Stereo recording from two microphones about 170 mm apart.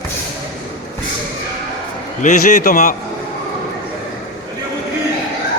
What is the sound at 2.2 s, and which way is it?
Speech, 45° left (ahead or behind).